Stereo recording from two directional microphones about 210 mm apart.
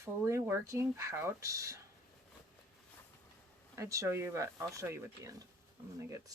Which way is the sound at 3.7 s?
15° right (ahead or behind).